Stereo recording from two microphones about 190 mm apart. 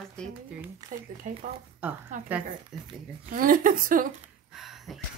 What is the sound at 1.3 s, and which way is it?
Speech, 40° right (ahead or behind).